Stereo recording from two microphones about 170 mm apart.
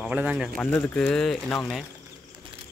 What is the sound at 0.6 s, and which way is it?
Speech, 10° left (ahead or behind).